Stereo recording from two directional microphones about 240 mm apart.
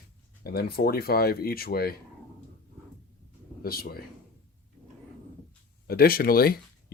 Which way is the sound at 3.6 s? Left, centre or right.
Left.